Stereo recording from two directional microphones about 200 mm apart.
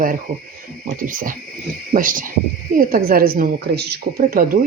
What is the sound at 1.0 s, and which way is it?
Speech, 45° right (ahead or behind).